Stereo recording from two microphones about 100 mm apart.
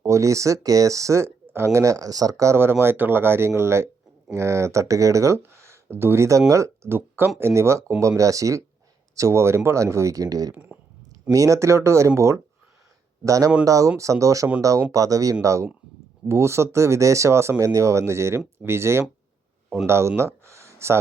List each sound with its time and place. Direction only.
0.0 s speech: 30° right (ahead or behind)
10.5 s speech: 15° right (ahead or behind)
11.3 s speech: 35° right (ahead or behind)